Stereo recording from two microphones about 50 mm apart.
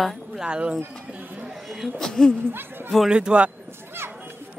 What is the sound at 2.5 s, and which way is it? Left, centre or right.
Speech, right.